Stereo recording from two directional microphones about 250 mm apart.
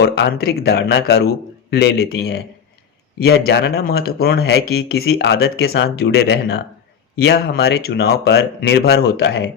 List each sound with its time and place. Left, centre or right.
0.0 s speech: left